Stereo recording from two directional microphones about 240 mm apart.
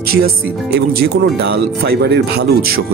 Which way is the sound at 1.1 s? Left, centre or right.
Right.